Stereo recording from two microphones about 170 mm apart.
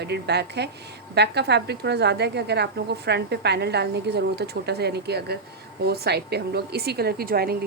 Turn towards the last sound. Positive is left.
turn(degrees=-60)  # may be behind; listen again after turning